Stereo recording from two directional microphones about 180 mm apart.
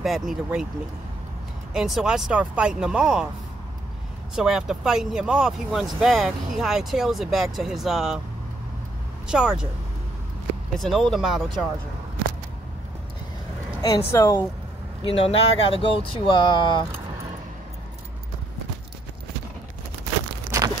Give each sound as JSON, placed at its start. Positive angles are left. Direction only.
{"t": 0.0, "sound": "speech", "side_deg": 0}
{"t": 1.7, "sound": "speech", "side_deg": -5}
{"t": 4.4, "sound": "speech", "side_deg": -5}
{"t": 9.3, "sound": "speech", "side_deg": -5}
{"t": 10.8, "sound": "speech", "side_deg": 0}
{"t": 13.7, "sound": "speech", "side_deg": 20}
{"t": 15.0, "sound": "speech", "side_deg": 30}